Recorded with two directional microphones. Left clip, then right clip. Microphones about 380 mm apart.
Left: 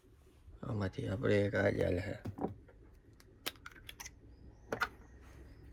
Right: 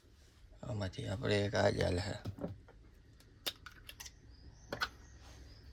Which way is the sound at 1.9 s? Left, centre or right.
Right.